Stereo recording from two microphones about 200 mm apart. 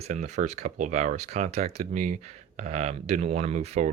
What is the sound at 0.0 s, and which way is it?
Speech, 35° right (ahead or behind).